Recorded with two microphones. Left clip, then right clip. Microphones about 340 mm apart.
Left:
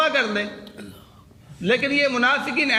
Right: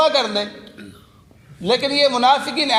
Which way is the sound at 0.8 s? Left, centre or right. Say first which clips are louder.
Right 1 dB; left.